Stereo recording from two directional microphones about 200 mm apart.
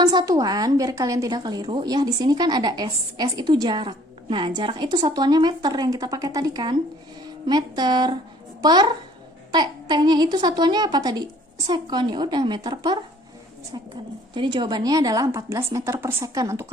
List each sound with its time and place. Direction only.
0.0 s a woman's voice: 20° right (ahead or behind)